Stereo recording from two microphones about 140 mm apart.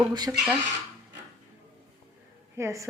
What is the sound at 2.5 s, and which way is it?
Speech, 20° right (ahead or behind).